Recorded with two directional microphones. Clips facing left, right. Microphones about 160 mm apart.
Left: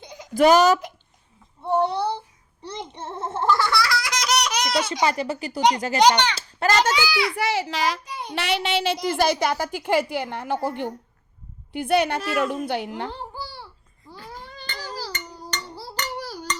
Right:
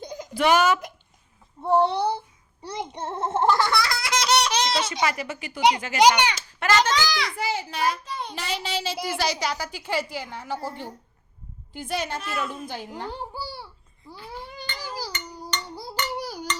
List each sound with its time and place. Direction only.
0.0 s a sound: 40° right (ahead or behind)
0.3 s a woman's voice: 40° left (ahead or behind)
1.6 s speech: 30° right (ahead or behind)
5.0 s a woman's voice: 30° left (ahead or behind)
6.0 s a child's voice: 10° right (ahead or behind)
6.3 s a child's voice: 35° left (ahead or behind)
6.9 s a child's voice: 5° left (ahead or behind)
7.3 s a child's voice: 80° left
8.0 s child singing: 10° left (ahead or behind)
8.4 s a woman's voice: 70° left (ahead or behind)
9.0 s a woman's voice: 55° left (ahead or behind)
12.3 s a woman's voice: 85° left; by 13.1 s 70° left (ahead or behind)
13.4 s babbling: 10° right (ahead or behind)
16.2 s a sound: 15° right (ahead or behind)